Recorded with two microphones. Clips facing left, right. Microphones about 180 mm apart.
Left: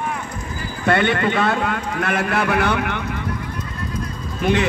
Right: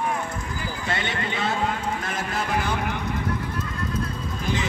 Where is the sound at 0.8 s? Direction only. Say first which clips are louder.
Left 13 dB; 60° left (ahead or behind).